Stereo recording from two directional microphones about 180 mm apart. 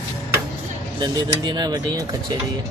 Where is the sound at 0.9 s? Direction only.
25° right (ahead or behind).